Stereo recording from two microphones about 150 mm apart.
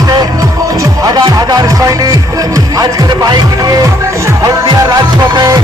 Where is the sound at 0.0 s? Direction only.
25° right (ahead or behind).